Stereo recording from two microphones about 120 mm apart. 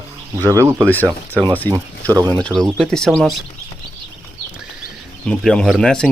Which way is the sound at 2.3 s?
5° left (ahead or behind).